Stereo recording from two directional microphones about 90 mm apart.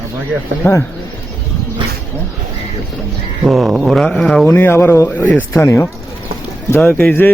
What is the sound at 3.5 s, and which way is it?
Speech, centre (ahead or behind).